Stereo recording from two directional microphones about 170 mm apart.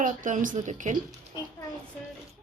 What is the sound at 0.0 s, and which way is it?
Speech, 50° right (ahead or behind).